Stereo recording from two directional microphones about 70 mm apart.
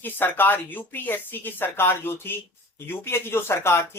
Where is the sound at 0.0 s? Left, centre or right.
Left.